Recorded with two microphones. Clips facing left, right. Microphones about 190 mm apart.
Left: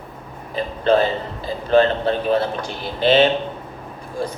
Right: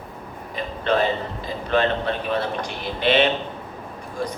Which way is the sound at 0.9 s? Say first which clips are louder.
Left 4 dB; 30° left (ahead or behind).